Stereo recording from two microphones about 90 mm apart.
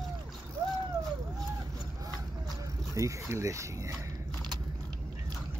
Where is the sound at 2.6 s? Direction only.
35° right (ahead or behind).